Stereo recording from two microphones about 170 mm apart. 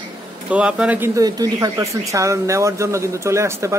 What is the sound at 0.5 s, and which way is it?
Speech, 5° right (ahead or behind).